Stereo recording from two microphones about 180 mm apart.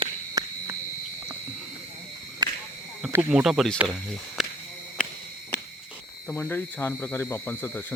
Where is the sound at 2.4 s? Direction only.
20° right (ahead or behind).